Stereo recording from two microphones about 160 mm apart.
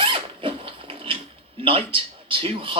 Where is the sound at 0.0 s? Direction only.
35° right (ahead or behind).